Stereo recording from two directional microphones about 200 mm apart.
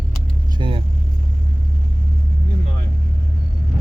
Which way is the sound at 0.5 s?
25° right (ahead or behind).